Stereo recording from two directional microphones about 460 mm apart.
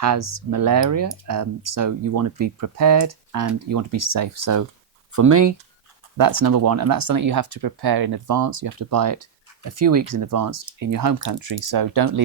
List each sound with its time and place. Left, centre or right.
0.0 s speech: right
7.8 s speech: right